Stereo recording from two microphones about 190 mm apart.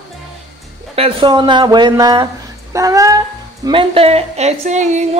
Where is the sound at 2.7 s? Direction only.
15° right (ahead or behind).